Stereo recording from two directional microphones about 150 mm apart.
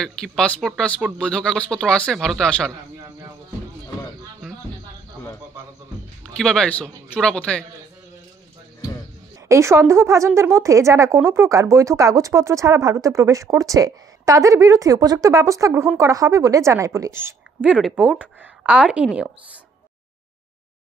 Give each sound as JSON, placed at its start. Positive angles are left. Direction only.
{"t": 0.0, "sound": "speech", "side_deg": 5}
{"t": 2.7, "sound": "speech", "side_deg": -25}
{"t": 6.3, "sound": "speech", "side_deg": 5}
{"t": 9.5, "sound": "a woman's voice", "side_deg": -20}